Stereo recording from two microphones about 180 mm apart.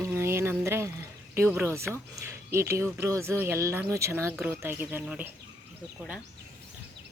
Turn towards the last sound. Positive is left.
turn(degrees=-5)  # may be behind; listen again after turning